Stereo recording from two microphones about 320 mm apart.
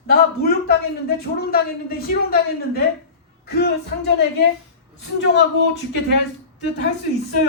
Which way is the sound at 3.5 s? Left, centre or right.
Left.